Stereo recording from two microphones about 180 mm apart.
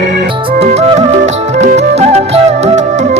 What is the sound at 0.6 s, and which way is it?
Music, 35° right (ahead or behind).